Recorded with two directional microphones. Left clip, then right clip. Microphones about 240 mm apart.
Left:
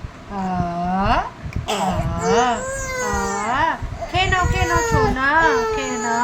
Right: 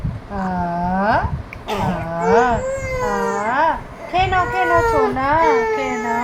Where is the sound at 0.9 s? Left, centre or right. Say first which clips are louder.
Right 2 dB; centre.